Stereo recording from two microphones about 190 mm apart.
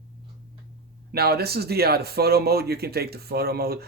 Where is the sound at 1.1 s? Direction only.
55° right (ahead or behind).